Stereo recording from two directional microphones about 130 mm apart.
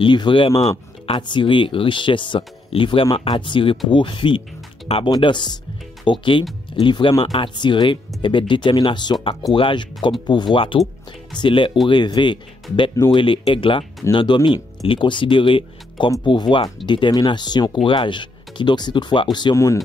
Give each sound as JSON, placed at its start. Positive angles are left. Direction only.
{"t": 0.0, "sound": "speech", "side_deg": 40}
{"t": 5.1, "sound": "speech", "side_deg": 35}
{"t": 13.5, "sound": "speech", "side_deg": 40}